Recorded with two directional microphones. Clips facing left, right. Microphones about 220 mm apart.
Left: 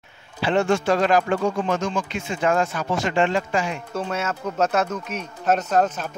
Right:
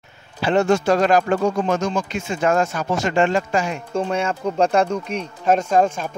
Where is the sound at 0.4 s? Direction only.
40° right (ahead or behind).